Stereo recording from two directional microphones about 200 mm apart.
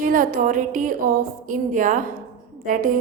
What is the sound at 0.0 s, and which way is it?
A woman's voice, 40° right (ahead or behind).